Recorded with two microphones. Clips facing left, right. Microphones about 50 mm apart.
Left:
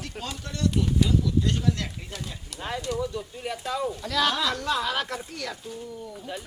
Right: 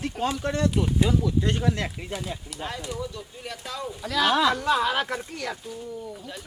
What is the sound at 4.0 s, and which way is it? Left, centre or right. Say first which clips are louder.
Speech: right 4 dB; centre.